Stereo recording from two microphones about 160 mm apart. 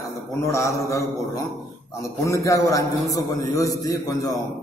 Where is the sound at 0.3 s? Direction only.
20° left (ahead or behind).